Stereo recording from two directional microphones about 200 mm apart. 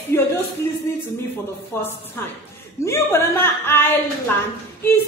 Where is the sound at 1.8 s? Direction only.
10° left (ahead or behind).